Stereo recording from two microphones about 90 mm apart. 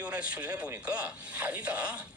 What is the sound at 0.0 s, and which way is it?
Speech, 15° right (ahead or behind).